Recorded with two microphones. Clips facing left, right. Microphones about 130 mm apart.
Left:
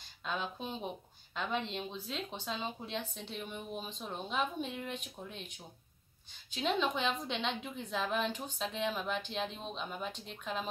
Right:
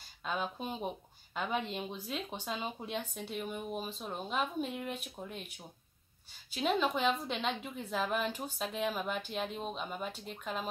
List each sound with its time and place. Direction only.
0.2 s a woman's voice: 5° right (ahead or behind)
6.5 s a woman's voice: 5° right (ahead or behind)